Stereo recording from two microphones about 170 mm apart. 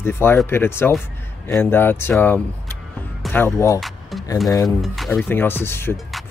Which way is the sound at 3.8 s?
Centre (ahead or behind).